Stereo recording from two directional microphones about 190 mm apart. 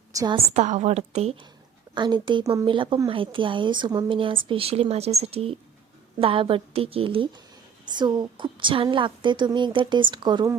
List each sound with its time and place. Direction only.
0.1 s a woman's voice: 20° right (ahead or behind)
0.3 s a woman's voice: 40° right (ahead or behind)